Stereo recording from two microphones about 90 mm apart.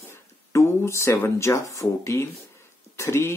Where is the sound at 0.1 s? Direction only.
30° left (ahead or behind).